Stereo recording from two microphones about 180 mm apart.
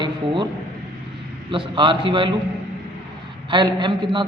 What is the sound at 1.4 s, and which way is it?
Speech, 25° right (ahead or behind).